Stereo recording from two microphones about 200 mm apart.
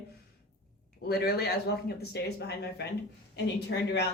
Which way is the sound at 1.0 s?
50° left (ahead or behind).